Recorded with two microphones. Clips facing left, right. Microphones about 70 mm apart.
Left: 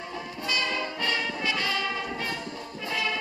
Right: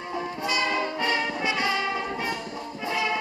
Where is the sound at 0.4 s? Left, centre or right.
Right.